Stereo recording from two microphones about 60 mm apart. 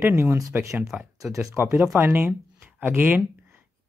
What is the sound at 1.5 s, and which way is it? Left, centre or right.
Speech, right.